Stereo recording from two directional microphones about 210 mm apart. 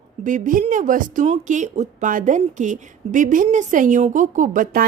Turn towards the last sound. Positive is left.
turn(degrees=-40)  # may be behind; listen again after turning